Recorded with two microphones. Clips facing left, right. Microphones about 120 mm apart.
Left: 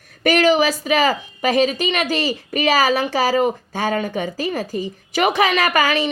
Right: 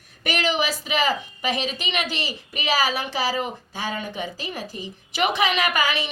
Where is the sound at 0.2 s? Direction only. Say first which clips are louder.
Left 9 dB; 45° left (ahead or behind).